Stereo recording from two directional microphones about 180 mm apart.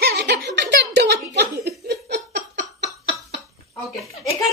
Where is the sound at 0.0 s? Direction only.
65° right (ahead or behind).